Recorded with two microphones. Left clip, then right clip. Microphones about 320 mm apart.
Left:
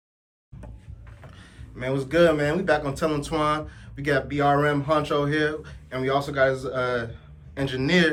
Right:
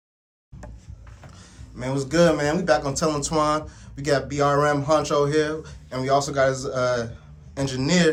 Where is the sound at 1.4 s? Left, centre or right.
Centre.